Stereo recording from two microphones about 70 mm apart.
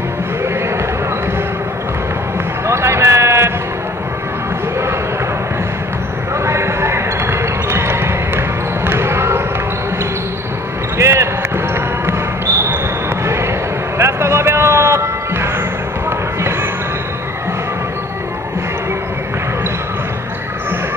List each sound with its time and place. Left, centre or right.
2.6 s a sound: right
6.4 s basketball bounce: right
11.0 s basketball bounce: right
13.9 s music: right